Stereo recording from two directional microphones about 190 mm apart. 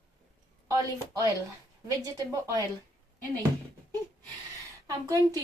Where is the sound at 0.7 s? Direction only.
20° right (ahead or behind).